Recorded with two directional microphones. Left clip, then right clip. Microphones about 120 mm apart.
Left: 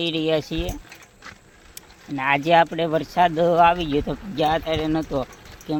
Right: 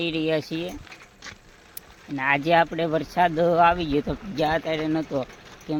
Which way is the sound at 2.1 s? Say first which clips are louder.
Left 3 dB; 15° left (ahead or behind).